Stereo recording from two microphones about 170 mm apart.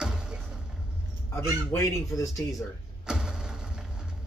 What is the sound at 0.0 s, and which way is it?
Vehicle, 5° right (ahead or behind).